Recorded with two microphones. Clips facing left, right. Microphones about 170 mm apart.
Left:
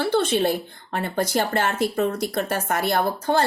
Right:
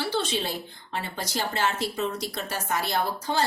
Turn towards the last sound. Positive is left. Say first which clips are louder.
# left 5 dB
turn(degrees=55)  # may be behind; listen again after turning